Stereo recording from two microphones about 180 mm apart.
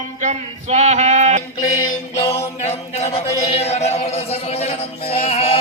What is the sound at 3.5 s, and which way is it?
Music, 35° left (ahead or behind).